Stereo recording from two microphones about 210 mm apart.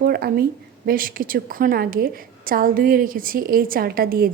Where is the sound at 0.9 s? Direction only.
40° right (ahead or behind).